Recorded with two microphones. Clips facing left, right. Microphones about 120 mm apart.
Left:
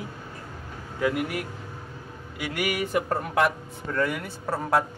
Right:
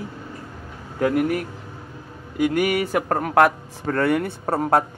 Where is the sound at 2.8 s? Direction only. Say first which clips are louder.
Right 4 dB; 75° right (ahead or behind).